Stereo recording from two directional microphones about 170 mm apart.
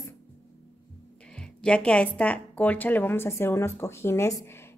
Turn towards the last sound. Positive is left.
turn(degrees=15)  # may be behind; listen again after turning